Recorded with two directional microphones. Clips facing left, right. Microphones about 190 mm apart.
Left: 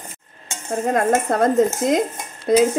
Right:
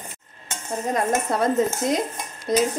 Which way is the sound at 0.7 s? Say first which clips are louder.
Left 5 dB; 50° left (ahead or behind).